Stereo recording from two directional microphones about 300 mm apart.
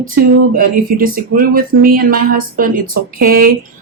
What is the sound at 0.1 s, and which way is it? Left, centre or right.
Speech, right.